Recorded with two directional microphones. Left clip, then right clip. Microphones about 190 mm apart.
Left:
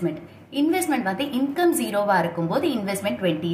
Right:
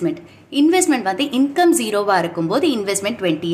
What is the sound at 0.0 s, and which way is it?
A woman's voice, 45° right (ahead or behind).